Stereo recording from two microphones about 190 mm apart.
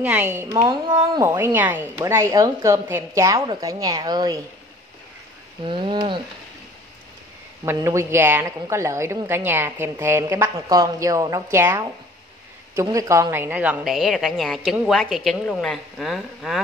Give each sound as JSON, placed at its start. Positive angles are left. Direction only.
{"t": 0.0, "sound": "a woman's voice", "side_deg": -10}
{"t": 1.2, "sound": "a woman's voice", "side_deg": -15}
{"t": 5.6, "sound": "speech", "side_deg": -25}
{"t": 7.6, "sound": "a woman's voice", "side_deg": -15}